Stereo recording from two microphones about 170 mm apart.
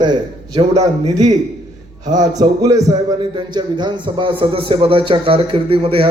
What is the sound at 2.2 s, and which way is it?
A man's voice, 20° right (ahead or behind).